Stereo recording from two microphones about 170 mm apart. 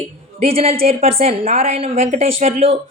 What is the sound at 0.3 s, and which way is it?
A woman's voice, 35° right (ahead or behind).